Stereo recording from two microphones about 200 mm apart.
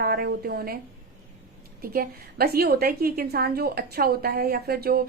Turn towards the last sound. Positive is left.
turn(degrees=-50)  # may be behind; listen again after turning